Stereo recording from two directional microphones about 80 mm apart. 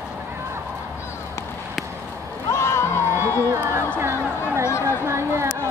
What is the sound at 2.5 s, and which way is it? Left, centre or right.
Music, left.